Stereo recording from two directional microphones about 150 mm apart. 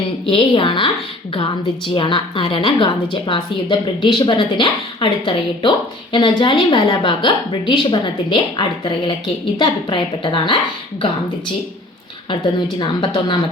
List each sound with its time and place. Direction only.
0.3 s a woman's voice: 35° left (ahead or behind)
2.0 s a woman's voice: 35° left (ahead or behind)
12.3 s a woman's voice: 30° left (ahead or behind)